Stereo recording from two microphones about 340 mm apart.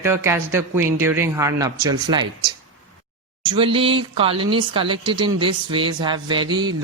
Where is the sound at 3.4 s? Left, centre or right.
Centre.